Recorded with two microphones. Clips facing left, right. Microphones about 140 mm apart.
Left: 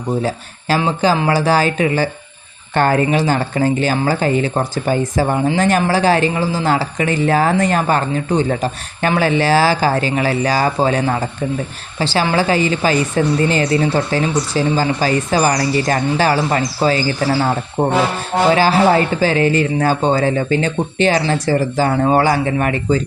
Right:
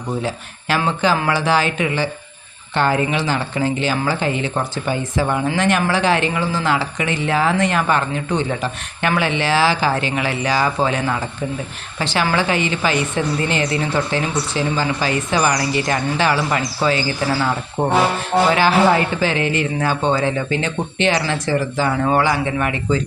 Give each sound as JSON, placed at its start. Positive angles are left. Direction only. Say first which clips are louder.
{"t": 0.2, "sound": "a woman's voice", "louder": "left 4 dB", "side_deg": 40}
{"t": 17.8, "sound": "speech", "louder": "left 3 dB", "side_deg": 20}
{"t": 18.5, "sound": "speech", "louder": "left 4 dB", "side_deg": 35}